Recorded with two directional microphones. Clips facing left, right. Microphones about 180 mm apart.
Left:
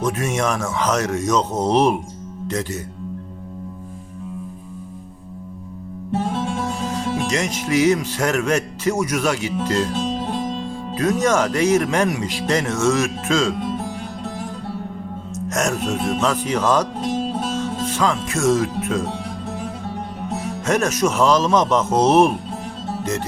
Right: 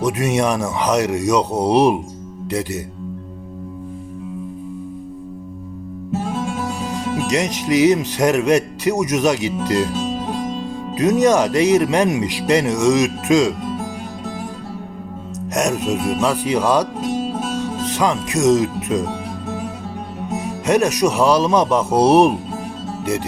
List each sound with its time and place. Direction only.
0.0 s speech: 15° right (ahead or behind)
6.7 s music: 15° right (ahead or behind)
10.9 s speech: 20° right (ahead or behind)
15.4 s speech: 15° right (ahead or behind)
20.3 s speech: 15° right (ahead or behind)